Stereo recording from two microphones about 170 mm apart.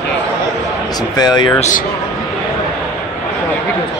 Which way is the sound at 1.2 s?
25° left (ahead or behind).